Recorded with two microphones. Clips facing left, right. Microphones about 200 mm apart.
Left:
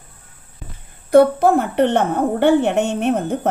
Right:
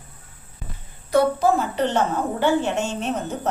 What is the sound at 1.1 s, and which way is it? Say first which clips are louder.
A woman's voice: left 6 dB; 60° left (ahead or behind).